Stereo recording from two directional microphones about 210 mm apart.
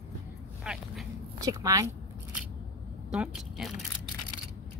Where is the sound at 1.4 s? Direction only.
15° right (ahead or behind).